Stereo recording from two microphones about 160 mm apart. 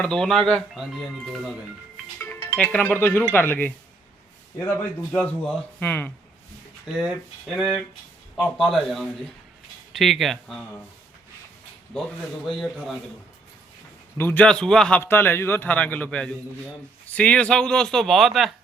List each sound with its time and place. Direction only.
0.0 s speech: 5° left (ahead or behind)
2.1 s speech: 10° left (ahead or behind)
4.7 s a man's voice: 10° left (ahead or behind)
6.9 s speech: centre (ahead or behind)
12.6 s speech: centre (ahead or behind)
14.2 s a man's voice: 10° left (ahead or behind)